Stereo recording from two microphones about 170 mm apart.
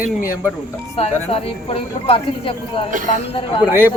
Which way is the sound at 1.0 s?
35° left (ahead or behind).